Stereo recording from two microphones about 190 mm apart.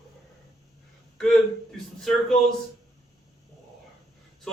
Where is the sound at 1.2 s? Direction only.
Centre (ahead or behind).